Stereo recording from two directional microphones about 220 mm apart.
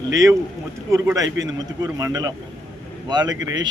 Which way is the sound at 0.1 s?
15° right (ahead or behind).